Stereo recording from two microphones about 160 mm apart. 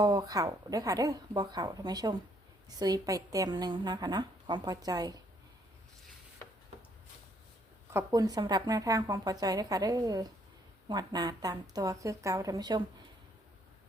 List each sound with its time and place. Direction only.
0.0 s speech: 25° right (ahead or behind)
7.9 s speech: 25° right (ahead or behind)